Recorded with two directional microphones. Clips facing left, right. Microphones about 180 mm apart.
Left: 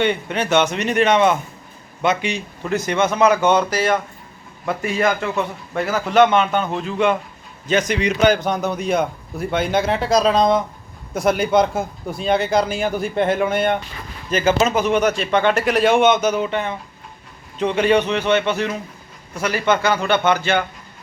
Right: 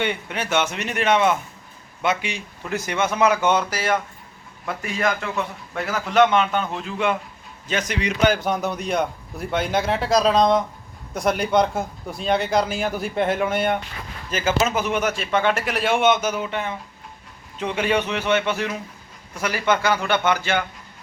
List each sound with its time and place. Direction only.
0.0 s a man's voice: 10° right (ahead or behind)
4.6 s a man's voice: centre (ahead or behind)